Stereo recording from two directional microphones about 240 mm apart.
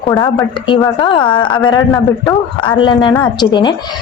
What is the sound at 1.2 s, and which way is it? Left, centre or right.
Speech, centre.